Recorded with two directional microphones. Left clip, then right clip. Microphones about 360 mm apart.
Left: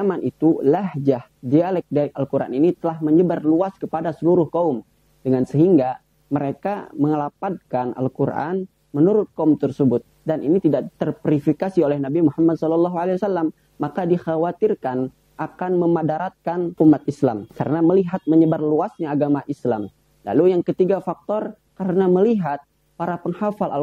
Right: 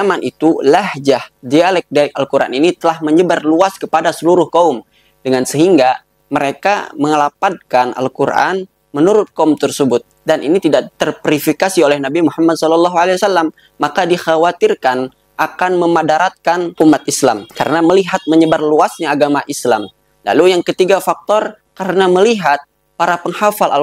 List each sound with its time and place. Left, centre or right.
0.0 s speech: centre
4.3 s speech: right
4.7 s speech: centre